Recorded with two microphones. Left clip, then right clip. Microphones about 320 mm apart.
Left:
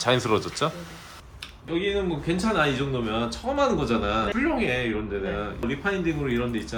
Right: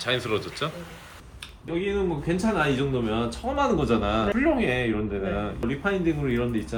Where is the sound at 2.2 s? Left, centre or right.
Centre.